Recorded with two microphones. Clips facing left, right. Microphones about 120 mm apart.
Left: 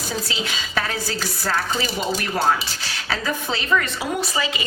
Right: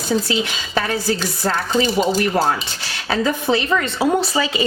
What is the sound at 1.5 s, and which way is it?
Speech, 30° right (ahead or behind).